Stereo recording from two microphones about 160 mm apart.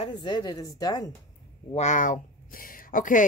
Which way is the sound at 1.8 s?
50° left (ahead or behind).